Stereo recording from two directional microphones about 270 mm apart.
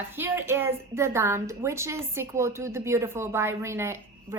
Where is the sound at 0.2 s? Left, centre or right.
Centre.